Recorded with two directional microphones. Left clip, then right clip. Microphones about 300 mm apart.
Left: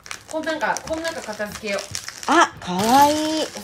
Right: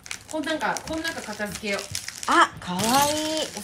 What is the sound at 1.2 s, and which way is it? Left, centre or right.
Speech, centre.